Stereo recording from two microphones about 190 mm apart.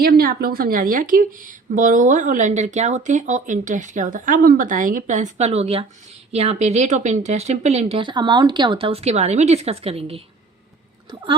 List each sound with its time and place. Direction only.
0.0 s speech: 55° right (ahead or behind); by 10.2 s 30° right (ahead or behind)